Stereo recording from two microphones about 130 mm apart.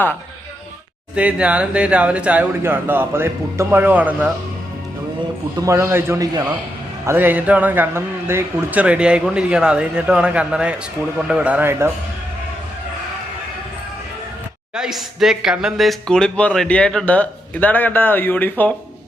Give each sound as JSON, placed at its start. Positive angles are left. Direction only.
{"t": 1.1, "sound": "a man's voice", "side_deg": -10}
{"t": 5.6, "sound": "a man's voice", "side_deg": -20}
{"t": 14.8, "sound": "speech", "side_deg": 0}